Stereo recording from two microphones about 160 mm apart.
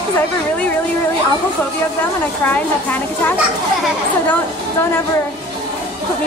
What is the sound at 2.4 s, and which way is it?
Speech, 10° left (ahead or behind).